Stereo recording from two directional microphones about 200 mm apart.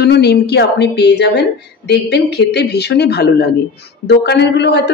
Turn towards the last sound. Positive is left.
turn(degrees=60)  # may be behind; listen again after turning